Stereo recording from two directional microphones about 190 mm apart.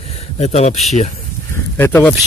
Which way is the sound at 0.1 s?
35° left (ahead or behind).